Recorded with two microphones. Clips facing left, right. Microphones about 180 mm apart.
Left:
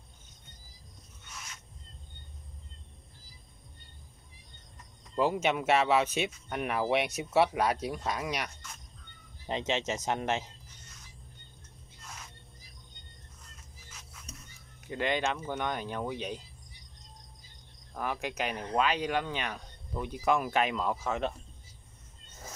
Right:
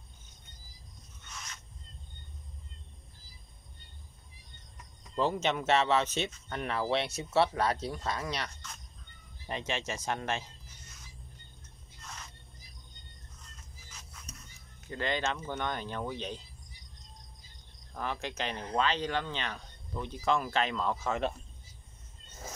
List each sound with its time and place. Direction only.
5.1 s speech: 10° left (ahead or behind)
9.5 s speech: 20° left (ahead or behind)
14.9 s speech: 15° left (ahead or behind)
17.9 s speech: 10° left (ahead or behind)